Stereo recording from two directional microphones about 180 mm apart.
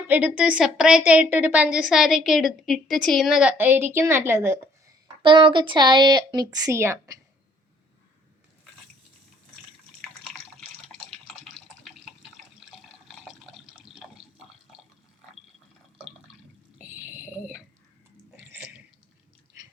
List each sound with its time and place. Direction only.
0.1 s a woman's voice: 10° right (ahead or behind)
5.2 s a woman's voice: 30° right (ahead or behind)
10.6 s water: 5° left (ahead or behind)
13.1 s water: centre (ahead or behind)
17.1 s a sound: 10° right (ahead or behind)